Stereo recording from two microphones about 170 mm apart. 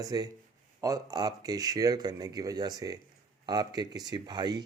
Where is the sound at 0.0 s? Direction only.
20° right (ahead or behind).